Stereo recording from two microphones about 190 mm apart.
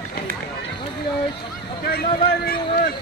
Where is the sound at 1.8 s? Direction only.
55° left (ahead or behind).